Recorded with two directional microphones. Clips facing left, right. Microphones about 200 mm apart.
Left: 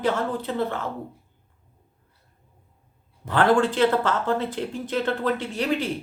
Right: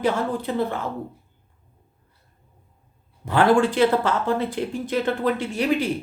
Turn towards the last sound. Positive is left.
turn(degrees=-10)  # may be behind; listen again after turning